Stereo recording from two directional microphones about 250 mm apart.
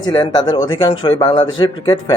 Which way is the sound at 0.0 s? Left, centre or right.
Centre.